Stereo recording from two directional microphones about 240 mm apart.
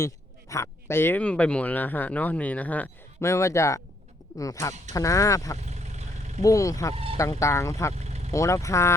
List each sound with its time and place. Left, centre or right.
0.0 s speech: centre
5.5 s vehicle: right
6.4 s speech: centre
6.9 s speech: right
7.2 s speech: centre
7.9 s vehicle: right
8.3 s speech: centre